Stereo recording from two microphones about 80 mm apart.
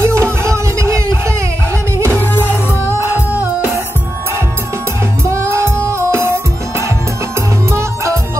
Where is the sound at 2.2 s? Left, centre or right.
Left.